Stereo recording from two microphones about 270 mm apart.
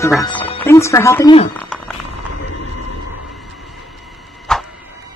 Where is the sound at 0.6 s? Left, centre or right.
Centre.